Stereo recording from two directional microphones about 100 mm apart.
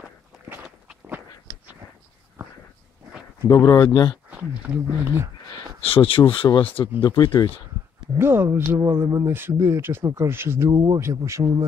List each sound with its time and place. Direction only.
3.4 s speech: 35° left (ahead or behind)
4.3 s speech: 15° right (ahead or behind)
5.8 s speech: 65° left (ahead or behind)
7.0 s speech: 45° left (ahead or behind)
8.2 s speech: 25° right (ahead or behind)
10.7 s speech: 40° right (ahead or behind)
11.0 s speech: 30° right (ahead or behind)